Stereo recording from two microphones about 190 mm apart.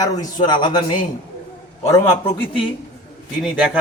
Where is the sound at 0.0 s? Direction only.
20° left (ahead or behind).